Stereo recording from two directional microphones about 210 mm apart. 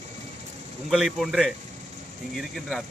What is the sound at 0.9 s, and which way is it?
Speech, centre (ahead or behind).